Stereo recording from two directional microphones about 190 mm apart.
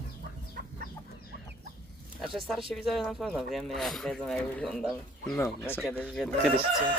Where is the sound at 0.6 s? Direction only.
50° right (ahead or behind).